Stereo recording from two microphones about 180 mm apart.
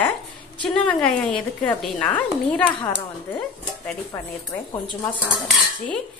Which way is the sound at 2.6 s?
25° left (ahead or behind).